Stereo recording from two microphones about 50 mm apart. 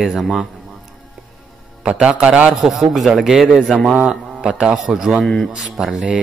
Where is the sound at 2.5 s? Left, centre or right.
Centre.